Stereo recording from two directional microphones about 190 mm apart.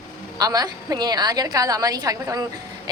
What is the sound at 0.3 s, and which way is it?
A woman's voice, 20° right (ahead or behind).